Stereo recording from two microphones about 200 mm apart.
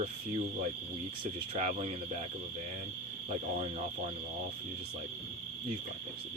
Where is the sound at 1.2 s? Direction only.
35° right (ahead or behind).